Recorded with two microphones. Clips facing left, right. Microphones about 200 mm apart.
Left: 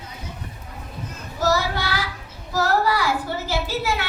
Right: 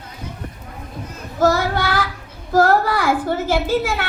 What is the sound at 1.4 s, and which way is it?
Child singing, 50° right (ahead or behind).